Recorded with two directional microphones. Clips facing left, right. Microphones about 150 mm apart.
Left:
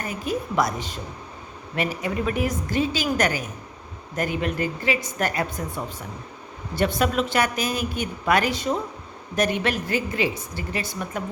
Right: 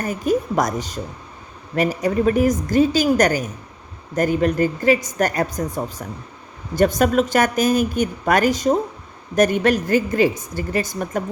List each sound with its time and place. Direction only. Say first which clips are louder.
0.0 s a woman's voice: right 7 dB; 45° right (ahead or behind)